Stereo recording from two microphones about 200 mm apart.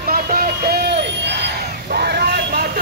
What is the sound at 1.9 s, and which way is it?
Vehicle, 55° right (ahead or behind).